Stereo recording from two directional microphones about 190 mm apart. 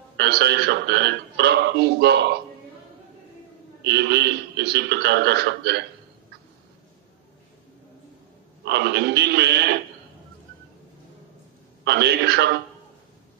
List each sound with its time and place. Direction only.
0.2 s a man's voice: 60° right (ahead or behind)
3.8 s a man's voice: 65° right (ahead or behind)
8.6 s a man's voice: 65° right (ahead or behind)
11.8 s a man's voice: 60° right (ahead or behind)